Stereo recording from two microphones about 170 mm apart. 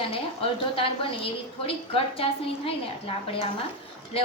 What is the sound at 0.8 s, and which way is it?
A woman's voice, 30° left (ahead or behind).